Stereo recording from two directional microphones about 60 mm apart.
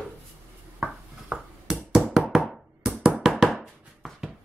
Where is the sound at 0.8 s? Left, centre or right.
Centre.